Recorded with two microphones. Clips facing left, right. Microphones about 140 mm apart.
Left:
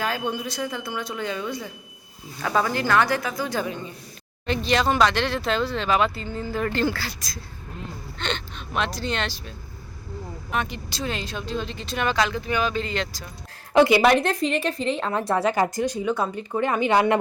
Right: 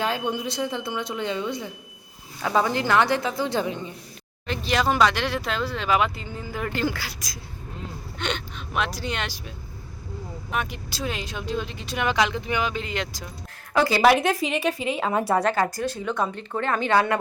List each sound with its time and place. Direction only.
0.0 s speech: 20° right (ahead or behind)
4.4 s speech: 5° right (ahead or behind)
10.5 s speech: 5° right (ahead or behind)
13.7 s a woman's voice: 20° left (ahead or behind)
14.0 s a woman's voice: centre (ahead or behind)
15.5 s speech: 15° left (ahead or behind)